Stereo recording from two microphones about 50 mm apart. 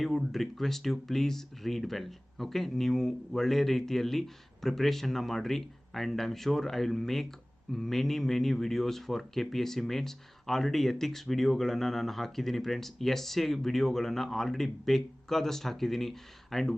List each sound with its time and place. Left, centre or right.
0.0 s speech: centre